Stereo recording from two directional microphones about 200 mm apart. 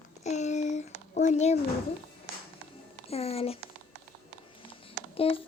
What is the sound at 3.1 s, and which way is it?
Speech, 30° left (ahead or behind).